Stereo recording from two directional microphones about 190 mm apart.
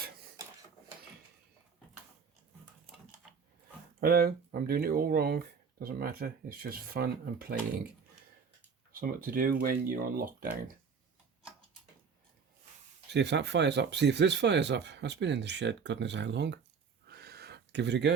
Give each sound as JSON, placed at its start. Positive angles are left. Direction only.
{"t": 4.0, "sound": "speech", "side_deg": -50}
{"t": 8.9, "sound": "speech", "side_deg": -50}
{"t": 13.1, "sound": "speech", "side_deg": -65}
{"t": 17.1, "sound": "a sound", "side_deg": -55}